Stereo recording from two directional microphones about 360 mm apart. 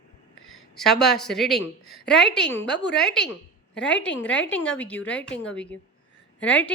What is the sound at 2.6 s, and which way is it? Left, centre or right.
Speech, left.